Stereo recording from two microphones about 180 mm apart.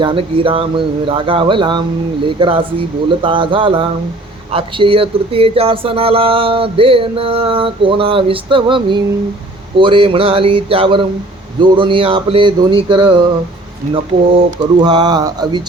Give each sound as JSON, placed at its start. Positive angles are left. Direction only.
{"t": 0.0, "sound": "speech", "side_deg": -30}